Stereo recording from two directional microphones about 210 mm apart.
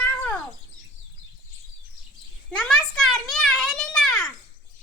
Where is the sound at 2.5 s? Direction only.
5° left (ahead or behind).